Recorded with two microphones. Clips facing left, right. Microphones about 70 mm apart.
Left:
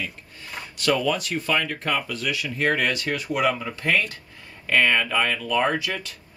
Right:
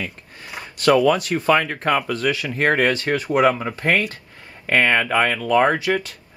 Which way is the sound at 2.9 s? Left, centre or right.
Right.